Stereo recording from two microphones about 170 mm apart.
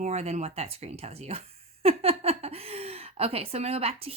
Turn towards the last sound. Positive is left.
turn(degrees=-35)  # may be behind; listen again after turning